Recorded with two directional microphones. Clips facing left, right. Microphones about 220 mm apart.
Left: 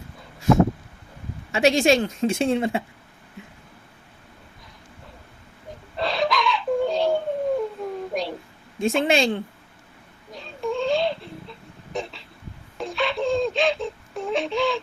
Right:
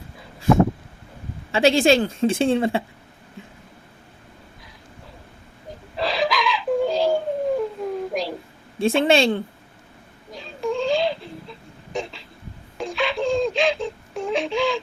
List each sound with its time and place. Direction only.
1.5 s a woman's voice: 30° right (ahead or behind)
6.0 s crying: centre (ahead or behind)
8.1 s a sound: centre (ahead or behind)
8.8 s a woman's voice: 30° right (ahead or behind)
10.3 s a sound: centre (ahead or behind)
12.7 s wail: centre (ahead or behind)